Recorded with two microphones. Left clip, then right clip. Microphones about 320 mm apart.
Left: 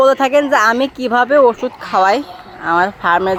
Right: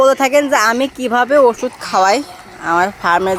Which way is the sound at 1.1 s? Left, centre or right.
Centre.